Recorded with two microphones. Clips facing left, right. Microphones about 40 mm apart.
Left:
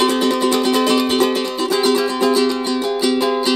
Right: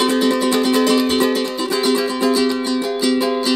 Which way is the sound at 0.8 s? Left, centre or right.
Centre.